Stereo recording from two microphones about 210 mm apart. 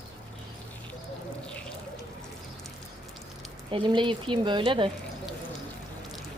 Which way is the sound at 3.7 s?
25° right (ahead or behind).